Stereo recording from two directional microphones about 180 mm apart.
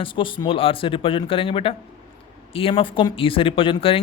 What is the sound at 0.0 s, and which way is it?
Speech, 30° left (ahead or behind).